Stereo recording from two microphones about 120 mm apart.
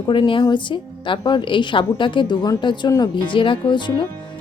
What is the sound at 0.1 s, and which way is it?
A woman's voice, 45° left (ahead or behind).